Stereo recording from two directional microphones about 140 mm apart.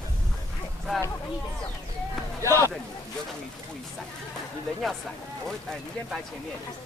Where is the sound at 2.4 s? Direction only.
20° right (ahead or behind).